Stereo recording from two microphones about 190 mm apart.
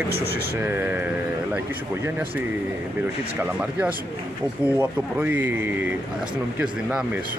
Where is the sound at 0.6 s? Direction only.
10° right (ahead or behind).